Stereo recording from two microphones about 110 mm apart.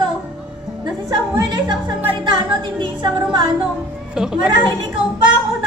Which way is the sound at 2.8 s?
40° right (ahead or behind).